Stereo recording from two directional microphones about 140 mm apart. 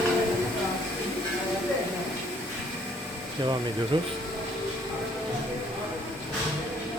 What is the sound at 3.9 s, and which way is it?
Speech, 40° right (ahead or behind).